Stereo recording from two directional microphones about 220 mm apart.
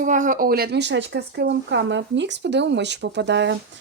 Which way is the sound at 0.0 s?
35° right (ahead or behind).